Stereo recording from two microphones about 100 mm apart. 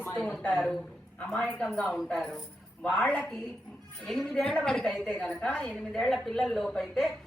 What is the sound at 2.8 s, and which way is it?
Speech, 15° left (ahead or behind).